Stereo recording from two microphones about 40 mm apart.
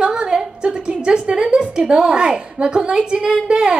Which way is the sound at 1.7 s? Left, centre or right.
Centre.